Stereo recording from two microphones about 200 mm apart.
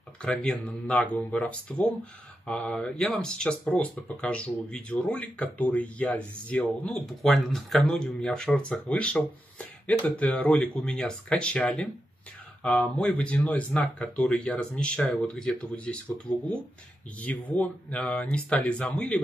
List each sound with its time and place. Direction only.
0.2 s speech: 5° left (ahead or behind)
16.3 s speech: 20° left (ahead or behind)
17.2 s speech: 10° left (ahead or behind)